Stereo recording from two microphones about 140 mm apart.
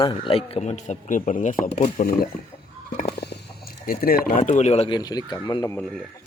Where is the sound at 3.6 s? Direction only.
90° left; by 4.9 s 50° left (ahead or behind).